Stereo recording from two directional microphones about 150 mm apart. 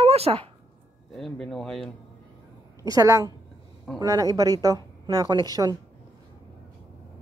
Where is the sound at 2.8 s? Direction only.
20° right (ahead or behind).